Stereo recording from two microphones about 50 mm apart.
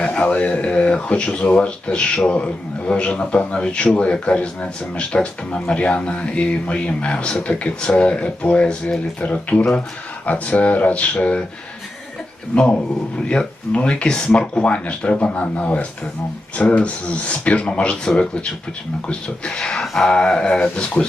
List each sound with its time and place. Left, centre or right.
0.0 s speech: left
12.5 s speech: left